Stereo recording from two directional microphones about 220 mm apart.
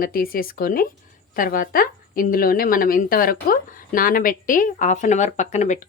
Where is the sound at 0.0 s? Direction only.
40° left (ahead or behind).